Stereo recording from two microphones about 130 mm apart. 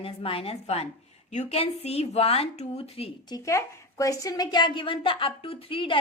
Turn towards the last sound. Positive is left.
turn(degrees=45)  # may be behind; listen again after turning